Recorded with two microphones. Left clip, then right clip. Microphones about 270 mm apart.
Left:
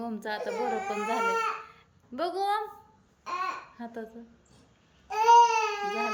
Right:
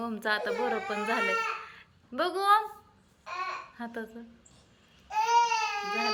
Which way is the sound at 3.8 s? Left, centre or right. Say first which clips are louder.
Right 2 dB; centre.